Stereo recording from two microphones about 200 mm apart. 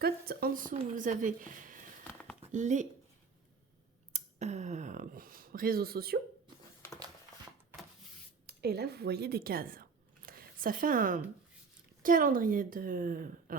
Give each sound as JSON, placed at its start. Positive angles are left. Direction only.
{"t": 0.0, "sound": "a woman's voice", "side_deg": -50}
{"t": 4.1, "sound": "speech", "side_deg": -35}
{"t": 8.4, "sound": "a woman's voice", "side_deg": -50}
{"t": 10.2, "sound": "a sound", "side_deg": -45}
{"t": 12.0, "sound": "a woman's voice", "side_deg": -45}